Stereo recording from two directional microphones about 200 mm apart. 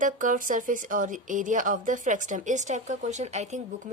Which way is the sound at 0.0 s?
40° right (ahead or behind).